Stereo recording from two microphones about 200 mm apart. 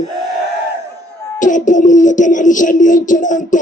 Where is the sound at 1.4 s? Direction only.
40° left (ahead or behind).